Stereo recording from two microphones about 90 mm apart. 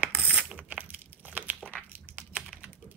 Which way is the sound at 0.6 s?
15° right (ahead or behind).